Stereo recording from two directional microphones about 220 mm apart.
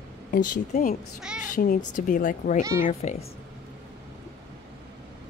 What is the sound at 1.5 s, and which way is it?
Speech, 40° left (ahead or behind).